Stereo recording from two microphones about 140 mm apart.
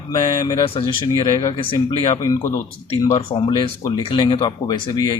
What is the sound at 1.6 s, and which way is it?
Speech, 40° left (ahead or behind).